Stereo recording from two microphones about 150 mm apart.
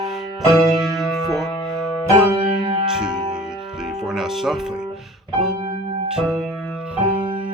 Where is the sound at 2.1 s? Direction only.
35° right (ahead or behind).